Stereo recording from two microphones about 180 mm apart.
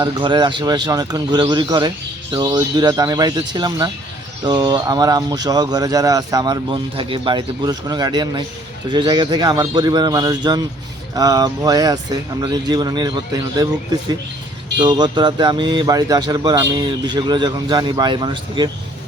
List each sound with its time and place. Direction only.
0.0 s speech: 25° right (ahead or behind)